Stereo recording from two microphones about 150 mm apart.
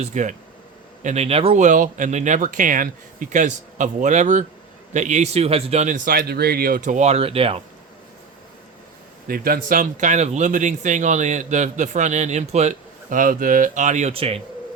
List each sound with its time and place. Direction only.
0.0 s speech: 55° right (ahead or behind)
6.1 s speech: 90° right; by 7.6 s 40° right (ahead or behind)
9.2 s speech: 75° right (ahead or behind); by 14.1 s 55° right (ahead or behind)
14.1 s speech: 40° right (ahead or behind)